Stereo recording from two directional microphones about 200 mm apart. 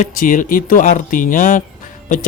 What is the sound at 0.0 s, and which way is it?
Speech, 40° left (ahead or behind).